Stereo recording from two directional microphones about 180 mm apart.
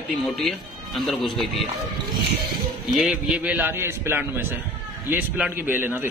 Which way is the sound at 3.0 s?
5° right (ahead or behind).